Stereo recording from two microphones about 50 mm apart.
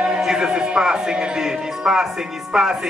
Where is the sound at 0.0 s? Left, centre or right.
Centre.